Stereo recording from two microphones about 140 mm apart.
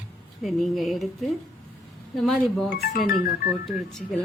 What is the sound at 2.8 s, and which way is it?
Speech, 90° left.